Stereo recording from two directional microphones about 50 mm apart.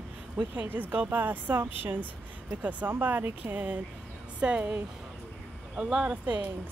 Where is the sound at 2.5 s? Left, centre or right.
Right.